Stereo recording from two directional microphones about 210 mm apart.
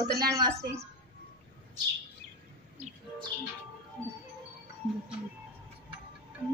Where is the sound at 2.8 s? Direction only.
30° right (ahead or behind).